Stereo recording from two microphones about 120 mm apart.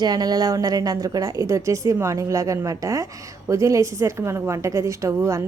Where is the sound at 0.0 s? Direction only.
35° right (ahead or behind).